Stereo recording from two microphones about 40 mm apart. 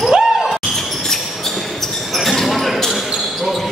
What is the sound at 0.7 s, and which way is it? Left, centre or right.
Basketball bounce, centre.